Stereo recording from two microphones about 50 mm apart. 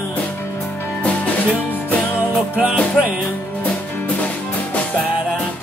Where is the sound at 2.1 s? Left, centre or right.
Right.